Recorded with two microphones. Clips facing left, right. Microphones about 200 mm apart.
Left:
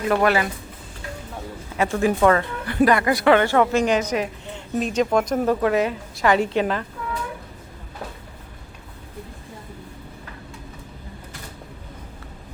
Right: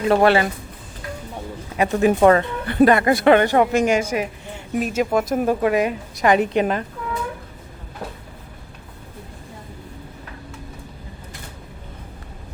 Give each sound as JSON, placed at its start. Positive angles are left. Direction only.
{"t": 0.1, "sound": "speech", "side_deg": -30}
{"t": 1.8, "sound": "speech", "side_deg": -20}